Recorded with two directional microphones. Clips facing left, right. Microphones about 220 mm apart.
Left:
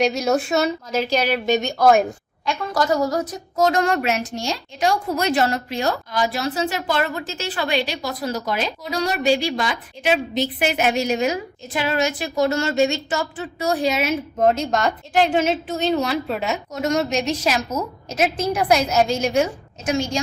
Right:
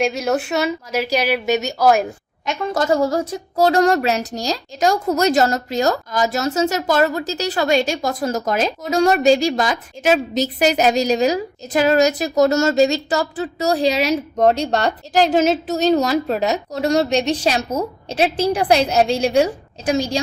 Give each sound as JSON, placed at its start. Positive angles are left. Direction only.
{"t": 0.0, "sound": "a woman's voice", "side_deg": -5}
{"t": 2.5, "sound": "a woman's voice", "side_deg": -25}